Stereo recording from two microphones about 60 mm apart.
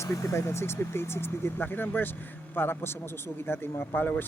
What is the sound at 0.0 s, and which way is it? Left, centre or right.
A man's voice, left.